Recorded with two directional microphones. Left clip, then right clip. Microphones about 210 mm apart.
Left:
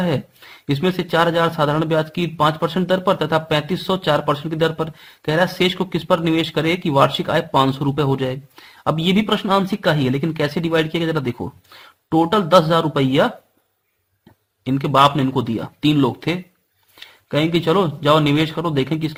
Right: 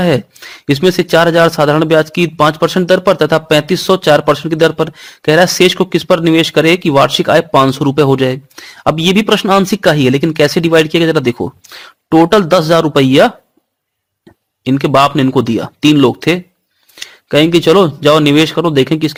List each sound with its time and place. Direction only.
0.0 s speech: 40° right (ahead or behind)
14.6 s speech: 40° right (ahead or behind)